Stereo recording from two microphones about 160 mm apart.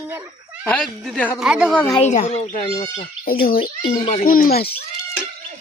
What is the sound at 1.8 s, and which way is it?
Speech, 10° left (ahead or behind).